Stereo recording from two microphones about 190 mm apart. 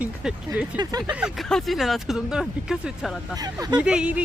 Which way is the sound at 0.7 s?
20° right (ahead or behind).